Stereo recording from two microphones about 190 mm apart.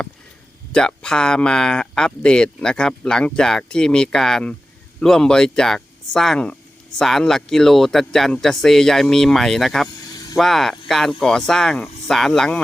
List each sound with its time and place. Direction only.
0.7 s speech: 5° left (ahead or behind)
10.1 s vehicle: 20° left (ahead or behind)
10.3 s speech: centre (ahead or behind)